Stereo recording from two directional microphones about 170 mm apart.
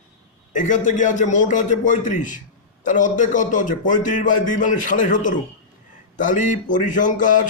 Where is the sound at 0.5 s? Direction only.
50° left (ahead or behind).